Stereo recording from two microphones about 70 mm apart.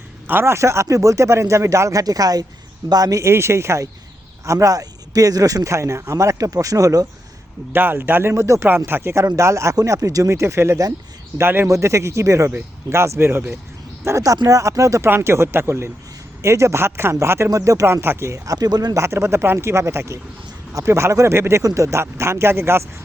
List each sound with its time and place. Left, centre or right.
0.3 s speech: right
3.2 s speech: right
7.7 s speech: right
9.2 s speech: right
10.2 s speech: right
11.3 s speech: right
11.7 s speech: right
14.0 s speech: right
15.1 s speech: right
18.5 s speech: right
18.9 s speech: right